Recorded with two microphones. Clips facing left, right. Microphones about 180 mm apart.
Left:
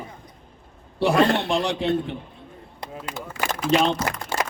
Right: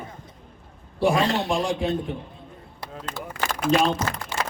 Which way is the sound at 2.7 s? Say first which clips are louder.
Left 1 dB; 10° left (ahead or behind).